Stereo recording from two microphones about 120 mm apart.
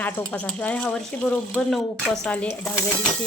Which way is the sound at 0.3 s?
10° left (ahead or behind).